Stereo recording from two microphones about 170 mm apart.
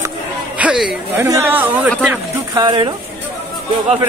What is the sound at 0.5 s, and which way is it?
Speech, 5° right (ahead or behind).